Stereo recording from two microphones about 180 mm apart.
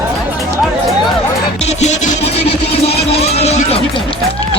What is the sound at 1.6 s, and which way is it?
Music, 40° left (ahead or behind).